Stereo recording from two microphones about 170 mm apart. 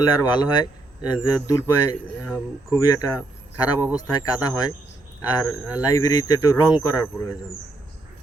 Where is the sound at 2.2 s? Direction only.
5° left (ahead or behind).